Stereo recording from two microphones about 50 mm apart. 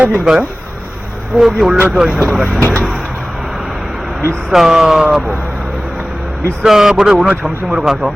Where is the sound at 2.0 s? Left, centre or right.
Centre.